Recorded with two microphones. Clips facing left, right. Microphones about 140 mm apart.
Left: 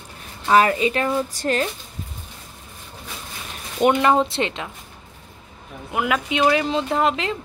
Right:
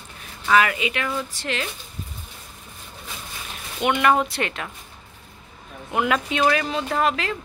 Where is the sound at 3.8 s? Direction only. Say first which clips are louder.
Left 3 dB; 35° left (ahead or behind).